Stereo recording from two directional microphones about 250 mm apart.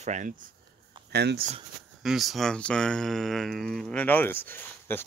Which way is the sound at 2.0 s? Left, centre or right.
Centre.